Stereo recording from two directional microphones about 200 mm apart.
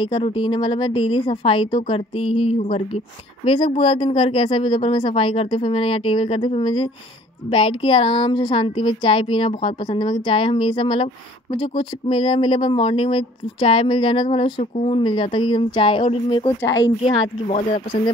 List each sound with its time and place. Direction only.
0.0 s speech: 25° left (ahead or behind)
17.0 s speech: 30° left (ahead or behind)